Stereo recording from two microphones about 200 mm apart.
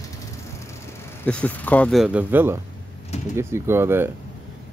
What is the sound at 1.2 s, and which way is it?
Speech, 5° left (ahead or behind).